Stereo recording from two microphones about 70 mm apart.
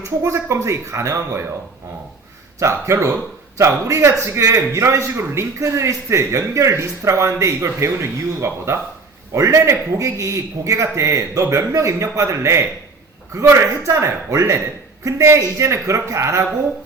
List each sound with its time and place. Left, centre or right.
0.2 s a man's voice: right
2.6 s a man's voice: right